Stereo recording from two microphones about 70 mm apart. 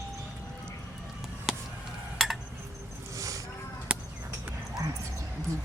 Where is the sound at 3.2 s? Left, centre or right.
Right.